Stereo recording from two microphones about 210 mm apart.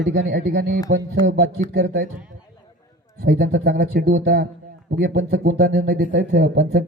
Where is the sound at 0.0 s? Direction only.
55° right (ahead or behind).